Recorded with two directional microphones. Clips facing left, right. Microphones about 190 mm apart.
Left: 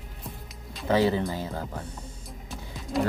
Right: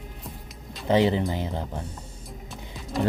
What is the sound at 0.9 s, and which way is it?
Speech, 20° right (ahead or behind).